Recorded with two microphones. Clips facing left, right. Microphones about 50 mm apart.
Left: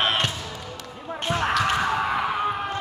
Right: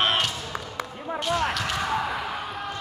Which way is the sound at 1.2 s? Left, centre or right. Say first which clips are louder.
Left 3 dB; left.